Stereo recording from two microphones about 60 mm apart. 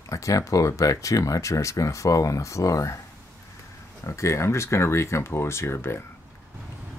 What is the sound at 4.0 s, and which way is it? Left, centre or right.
Speech, left.